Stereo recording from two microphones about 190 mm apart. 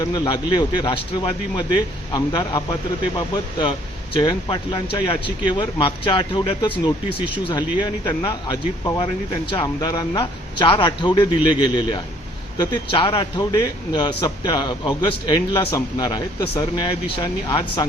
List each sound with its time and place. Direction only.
0.0 s a man's voice: 20° left (ahead or behind)
4.2 s a man's voice: 25° left (ahead or behind)